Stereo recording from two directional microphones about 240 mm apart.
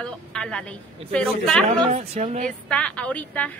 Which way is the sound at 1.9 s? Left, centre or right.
Right.